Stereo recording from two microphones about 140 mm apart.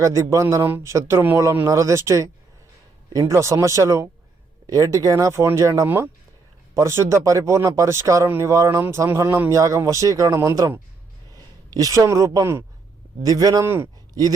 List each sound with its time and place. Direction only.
0.0 s speech: 20° right (ahead or behind)